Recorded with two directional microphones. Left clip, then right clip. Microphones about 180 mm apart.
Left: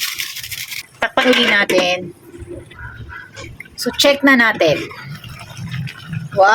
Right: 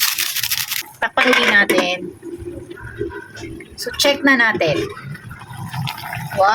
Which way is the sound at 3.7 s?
15° left (ahead or behind).